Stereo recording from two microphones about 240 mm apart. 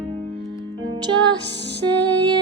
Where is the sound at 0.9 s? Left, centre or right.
Centre.